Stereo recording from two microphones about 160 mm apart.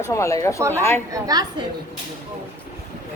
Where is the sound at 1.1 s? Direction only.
25° right (ahead or behind).